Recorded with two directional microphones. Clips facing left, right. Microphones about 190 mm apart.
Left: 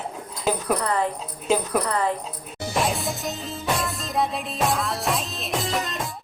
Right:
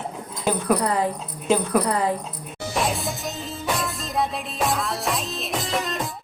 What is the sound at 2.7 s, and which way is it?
Music, centre (ahead or behind).